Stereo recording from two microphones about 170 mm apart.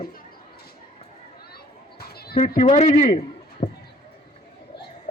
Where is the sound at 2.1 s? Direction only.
65° left (ahead or behind).